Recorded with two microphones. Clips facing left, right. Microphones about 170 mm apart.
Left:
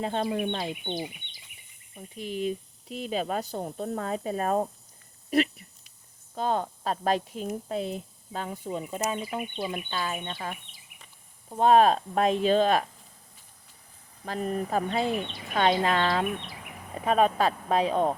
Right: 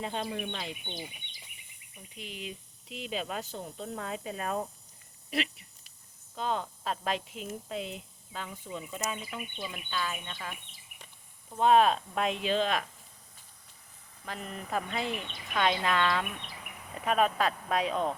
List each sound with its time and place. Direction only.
0.0 s speech: 40° left (ahead or behind)
2.0 s speech: 45° left (ahead or behind)
14.3 s speech: 40° left (ahead or behind)